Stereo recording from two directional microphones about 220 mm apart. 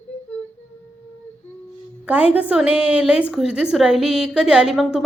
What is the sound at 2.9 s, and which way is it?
Speech, 5° right (ahead or behind).